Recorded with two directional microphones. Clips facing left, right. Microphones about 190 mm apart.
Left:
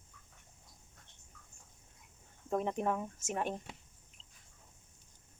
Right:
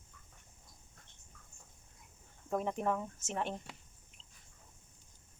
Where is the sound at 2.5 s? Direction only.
20° left (ahead or behind).